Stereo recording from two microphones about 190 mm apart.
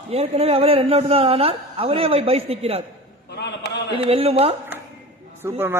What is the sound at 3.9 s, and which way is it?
Speech, 30° right (ahead or behind).